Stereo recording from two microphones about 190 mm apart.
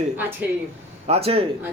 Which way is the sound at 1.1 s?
30° right (ahead or behind).